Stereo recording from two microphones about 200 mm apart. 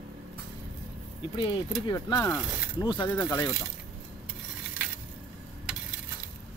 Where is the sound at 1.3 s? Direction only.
25° left (ahead or behind).